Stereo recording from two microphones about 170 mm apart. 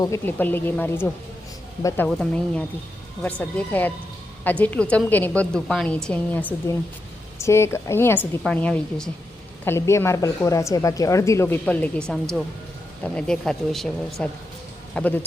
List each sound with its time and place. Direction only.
0.0 s a woman's voice: 15° left (ahead or behind)
2.0 s a woman's voice: 5° left (ahead or behind)